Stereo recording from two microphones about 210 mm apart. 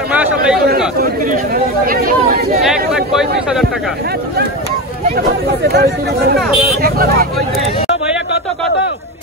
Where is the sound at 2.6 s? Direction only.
Centre (ahead or behind).